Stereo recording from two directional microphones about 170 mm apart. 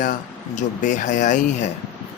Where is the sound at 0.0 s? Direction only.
50° left (ahead or behind).